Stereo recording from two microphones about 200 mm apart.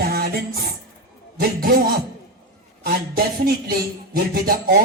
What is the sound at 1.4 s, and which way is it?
Music, 45° right (ahead or behind).